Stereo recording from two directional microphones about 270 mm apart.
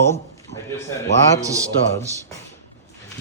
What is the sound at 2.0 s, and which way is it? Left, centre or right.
Speech, centre.